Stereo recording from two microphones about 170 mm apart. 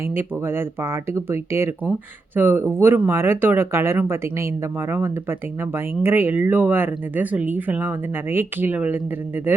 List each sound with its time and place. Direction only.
0.2 s speech: 15° right (ahead or behind)